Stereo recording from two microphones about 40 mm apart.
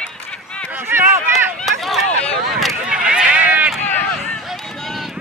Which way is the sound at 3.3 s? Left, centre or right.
Right.